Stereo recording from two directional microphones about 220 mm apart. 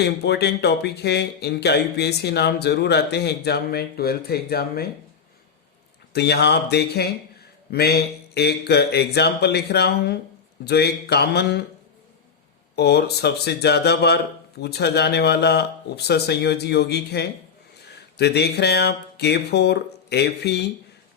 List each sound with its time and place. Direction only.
0.0 s speech: 50° left (ahead or behind)
6.1 s speech: 50° left (ahead or behind)
12.7 s speech: 45° left (ahead or behind)